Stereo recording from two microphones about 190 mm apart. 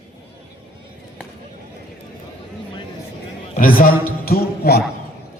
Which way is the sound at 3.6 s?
50° left (ahead or behind).